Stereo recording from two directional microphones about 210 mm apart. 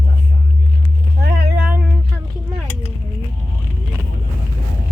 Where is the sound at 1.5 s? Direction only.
5° right (ahead or behind).